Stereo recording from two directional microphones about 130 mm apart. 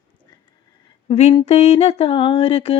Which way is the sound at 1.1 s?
55° left (ahead or behind).